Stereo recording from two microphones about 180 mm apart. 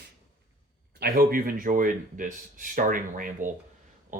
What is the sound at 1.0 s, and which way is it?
A man's voice, 55° right (ahead or behind).